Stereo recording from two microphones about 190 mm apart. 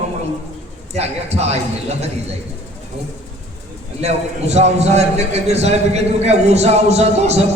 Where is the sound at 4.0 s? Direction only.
35° right (ahead or behind).